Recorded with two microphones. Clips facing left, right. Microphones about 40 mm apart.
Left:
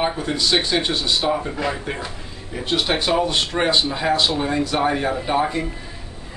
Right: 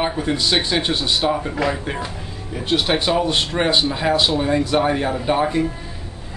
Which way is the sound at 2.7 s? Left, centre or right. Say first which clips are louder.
Right 1 dB; centre.